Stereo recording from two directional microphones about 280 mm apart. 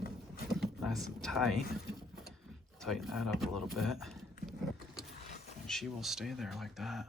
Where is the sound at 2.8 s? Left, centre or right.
Centre.